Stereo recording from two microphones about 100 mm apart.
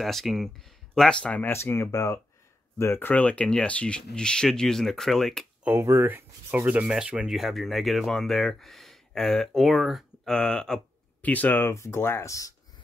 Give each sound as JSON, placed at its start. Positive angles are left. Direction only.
{"t": 0.0, "sound": "speech", "side_deg": 0}
{"t": 1.5, "sound": "speech", "side_deg": 25}
{"t": 5.6, "sound": "speech", "side_deg": -20}
{"t": 5.9, "sound": "rub", "side_deg": -20}
{"t": 6.9, "sound": "speech", "side_deg": -10}
{"t": 11.7, "sound": "speech", "side_deg": 30}